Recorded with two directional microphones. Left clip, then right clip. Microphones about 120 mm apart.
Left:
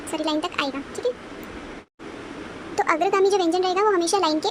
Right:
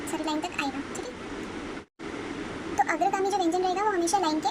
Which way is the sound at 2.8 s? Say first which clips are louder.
Left 6 dB; 60° left (ahead or behind).